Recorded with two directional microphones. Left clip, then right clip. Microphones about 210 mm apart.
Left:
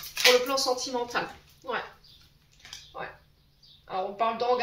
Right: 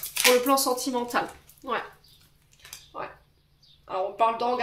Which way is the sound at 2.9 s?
45° right (ahead or behind).